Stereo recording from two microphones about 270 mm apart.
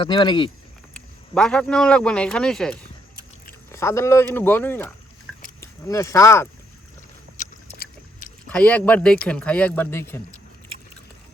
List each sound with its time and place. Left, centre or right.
0.0 s speech: centre
0.9 s a man's voice: centre
7.3 s a sound: left
8.4 s speech: centre